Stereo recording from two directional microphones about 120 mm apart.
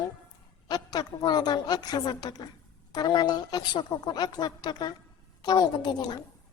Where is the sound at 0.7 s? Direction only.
35° left (ahead or behind).